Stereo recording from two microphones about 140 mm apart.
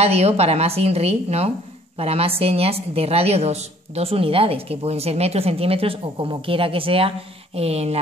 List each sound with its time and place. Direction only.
0.0 s a woman's voice: 45° right (ahead or behind)